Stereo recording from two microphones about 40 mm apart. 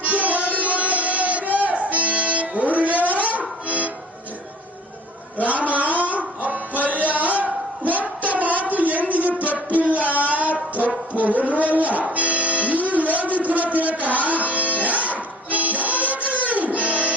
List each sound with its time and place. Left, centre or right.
0.0 s music: right
5.4 s music: right